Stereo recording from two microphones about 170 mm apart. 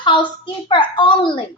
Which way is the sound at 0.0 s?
25° left (ahead or behind).